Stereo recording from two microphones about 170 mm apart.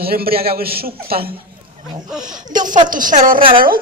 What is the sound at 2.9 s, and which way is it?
Speech, 50° right (ahead or behind).